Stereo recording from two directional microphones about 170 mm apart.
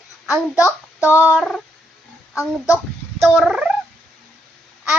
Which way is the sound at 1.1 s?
15° left (ahead or behind).